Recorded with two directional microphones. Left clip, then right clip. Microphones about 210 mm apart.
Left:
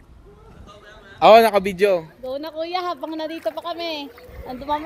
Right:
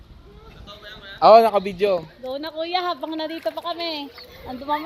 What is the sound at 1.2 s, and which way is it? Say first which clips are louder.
Speech: left 1 dB; 35° left (ahead or behind).